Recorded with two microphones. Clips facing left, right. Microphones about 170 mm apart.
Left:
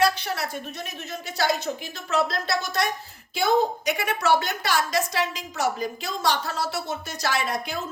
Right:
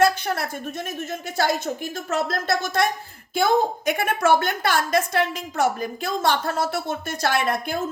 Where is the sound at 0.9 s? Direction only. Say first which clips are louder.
Right 3 dB; 50° right (ahead or behind).